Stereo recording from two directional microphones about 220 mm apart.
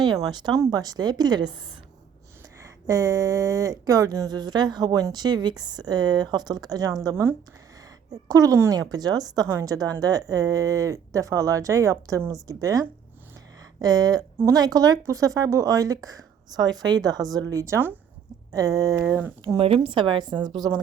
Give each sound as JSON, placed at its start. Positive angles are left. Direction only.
{"t": 0.0, "sound": "speech", "side_deg": -20}
{"t": 2.6, "sound": "a woman's voice", "side_deg": -15}
{"t": 19.5, "sound": "speech", "side_deg": -25}